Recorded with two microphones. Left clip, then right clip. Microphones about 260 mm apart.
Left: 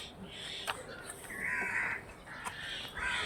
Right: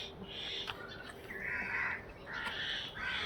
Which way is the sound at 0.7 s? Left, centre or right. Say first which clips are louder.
Left 5 dB; centre.